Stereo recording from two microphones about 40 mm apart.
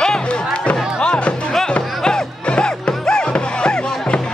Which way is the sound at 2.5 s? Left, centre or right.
Left.